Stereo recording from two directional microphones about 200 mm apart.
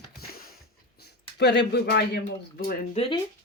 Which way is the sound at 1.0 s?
55° left (ahead or behind).